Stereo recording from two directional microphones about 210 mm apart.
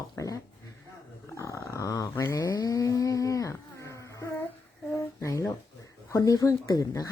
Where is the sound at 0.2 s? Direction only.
15° left (ahead or behind).